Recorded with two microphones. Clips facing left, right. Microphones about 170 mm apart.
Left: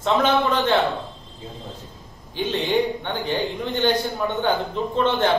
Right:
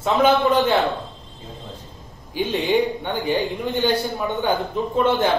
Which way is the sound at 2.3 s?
10° right (ahead or behind).